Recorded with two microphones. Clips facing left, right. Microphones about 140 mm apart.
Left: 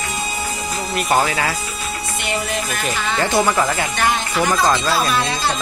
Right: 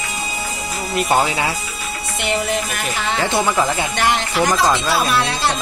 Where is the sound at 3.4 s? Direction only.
15° right (ahead or behind).